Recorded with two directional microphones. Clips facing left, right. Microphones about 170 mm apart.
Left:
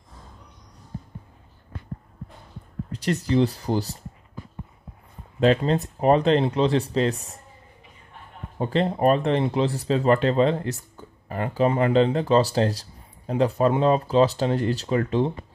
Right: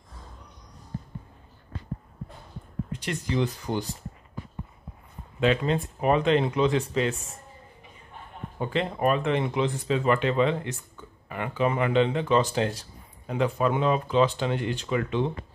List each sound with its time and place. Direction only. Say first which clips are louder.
2.9 s speech: left 7 dB; 35° left (ahead or behind)
5.4 s speech: left 4 dB; 35° left (ahead or behind)
8.5 s speech: left 5 dB; 35° left (ahead or behind)